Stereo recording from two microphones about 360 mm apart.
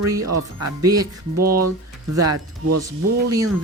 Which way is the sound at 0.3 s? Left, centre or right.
Right.